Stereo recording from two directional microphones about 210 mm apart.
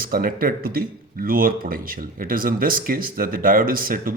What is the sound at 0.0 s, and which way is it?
A man's voice, 45° right (ahead or behind).